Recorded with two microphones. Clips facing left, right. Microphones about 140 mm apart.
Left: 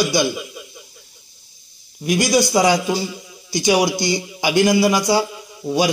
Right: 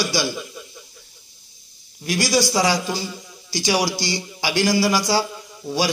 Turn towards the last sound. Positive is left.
turn(degrees=20)  # may be behind; listen again after turning